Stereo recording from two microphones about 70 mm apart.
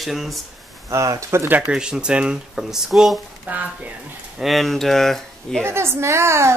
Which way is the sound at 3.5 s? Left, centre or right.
Right.